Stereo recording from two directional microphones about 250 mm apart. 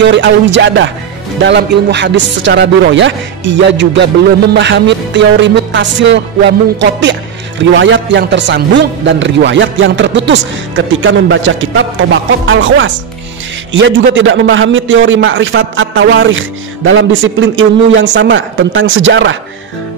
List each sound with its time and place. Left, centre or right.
0.0 s music: right